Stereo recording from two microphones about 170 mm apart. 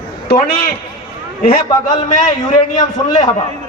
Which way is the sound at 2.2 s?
45° left (ahead or behind).